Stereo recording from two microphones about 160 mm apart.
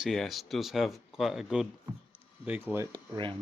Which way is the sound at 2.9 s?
30° right (ahead or behind).